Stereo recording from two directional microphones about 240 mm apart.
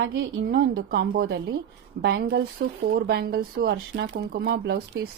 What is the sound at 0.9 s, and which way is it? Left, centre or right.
Speech, right.